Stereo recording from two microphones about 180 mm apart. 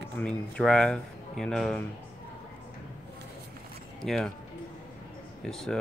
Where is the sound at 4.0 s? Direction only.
Centre (ahead or behind).